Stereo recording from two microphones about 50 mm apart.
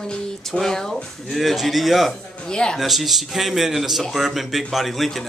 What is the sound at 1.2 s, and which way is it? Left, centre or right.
Speech, centre.